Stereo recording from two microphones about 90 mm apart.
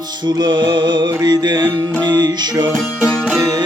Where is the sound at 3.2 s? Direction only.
Centre (ahead or behind).